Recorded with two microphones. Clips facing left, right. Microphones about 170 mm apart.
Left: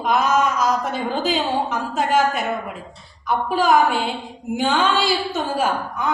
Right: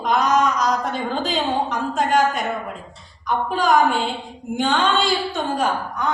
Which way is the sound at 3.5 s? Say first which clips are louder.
Left 1 dB; 5° left (ahead or behind).